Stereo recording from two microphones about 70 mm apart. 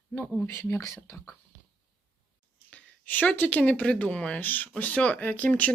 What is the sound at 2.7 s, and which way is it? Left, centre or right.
Speech, left.